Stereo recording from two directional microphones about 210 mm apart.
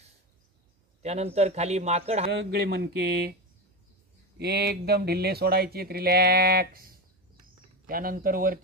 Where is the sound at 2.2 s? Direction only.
50° right (ahead or behind).